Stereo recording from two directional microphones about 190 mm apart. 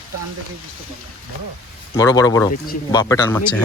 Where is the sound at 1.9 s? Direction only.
20° left (ahead or behind).